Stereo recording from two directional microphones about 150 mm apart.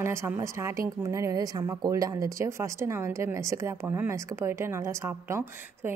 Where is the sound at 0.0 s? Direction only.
15° right (ahead or behind).